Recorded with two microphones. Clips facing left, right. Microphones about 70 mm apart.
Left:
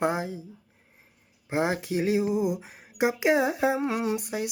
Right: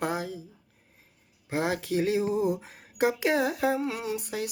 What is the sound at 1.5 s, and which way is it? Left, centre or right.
Speech, left.